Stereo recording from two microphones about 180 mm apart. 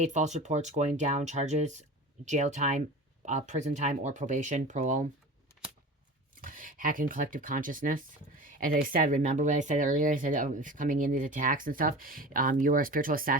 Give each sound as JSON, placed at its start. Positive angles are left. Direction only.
{"t": 0.0, "sound": "speech", "side_deg": -40}
{"t": 6.4, "sound": "speech", "side_deg": -50}